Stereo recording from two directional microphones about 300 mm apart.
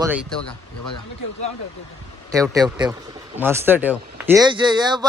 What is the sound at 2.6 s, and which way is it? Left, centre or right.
Speech, centre.